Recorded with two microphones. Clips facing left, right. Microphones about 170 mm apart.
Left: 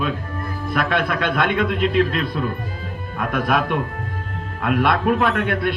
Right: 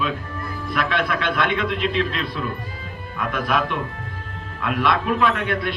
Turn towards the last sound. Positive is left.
turn(degrees=50)  # may be behind; listen again after turning